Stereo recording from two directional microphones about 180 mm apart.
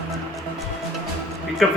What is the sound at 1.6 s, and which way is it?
Speech, centre (ahead or behind).